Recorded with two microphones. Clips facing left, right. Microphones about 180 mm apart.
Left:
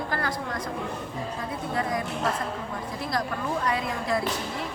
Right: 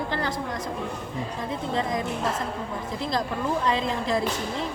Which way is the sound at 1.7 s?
20° right (ahead or behind).